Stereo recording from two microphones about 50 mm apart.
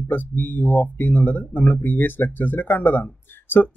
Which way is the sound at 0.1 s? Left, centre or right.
Left.